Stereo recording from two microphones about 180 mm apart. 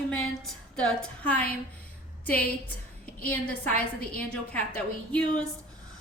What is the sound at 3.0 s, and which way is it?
A woman's voice, 5° left (ahead or behind).